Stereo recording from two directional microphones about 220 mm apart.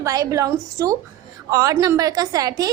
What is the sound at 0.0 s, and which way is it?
A woman's voice, 15° right (ahead or behind).